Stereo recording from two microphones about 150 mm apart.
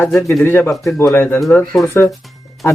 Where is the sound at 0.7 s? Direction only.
Centre (ahead or behind).